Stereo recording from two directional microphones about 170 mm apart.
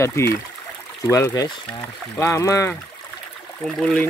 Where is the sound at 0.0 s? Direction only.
15° left (ahead or behind).